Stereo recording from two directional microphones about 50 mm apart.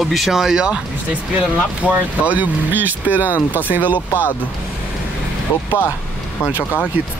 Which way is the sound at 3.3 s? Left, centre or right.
Left.